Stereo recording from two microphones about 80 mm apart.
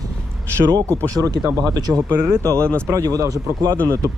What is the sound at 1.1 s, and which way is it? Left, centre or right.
Speech, right.